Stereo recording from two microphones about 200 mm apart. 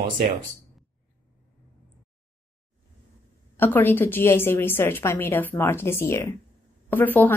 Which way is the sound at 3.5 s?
10° left (ahead or behind).